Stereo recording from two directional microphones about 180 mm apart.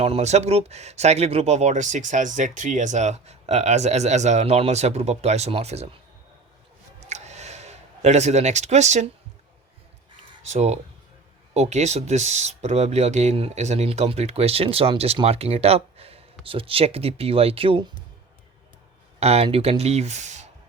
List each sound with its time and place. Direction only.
0.0 s speech: 35° right (ahead or behind)
7.1 s a sound: 40° right (ahead or behind)
10.4 s speech: 40° right (ahead or behind)
19.2 s speech: 35° right (ahead or behind)